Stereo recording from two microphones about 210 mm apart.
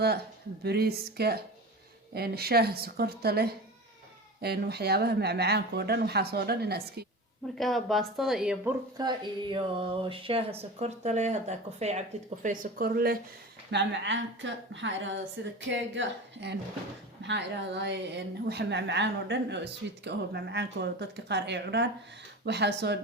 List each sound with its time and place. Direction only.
0.6 s speech: 50° right (ahead or behind)
7.6 s speech: centre (ahead or behind)
9.0 s speech: 20° right (ahead or behind); by 13.1 s 45° right (ahead or behind)
13.7 s speech: 55° right (ahead or behind)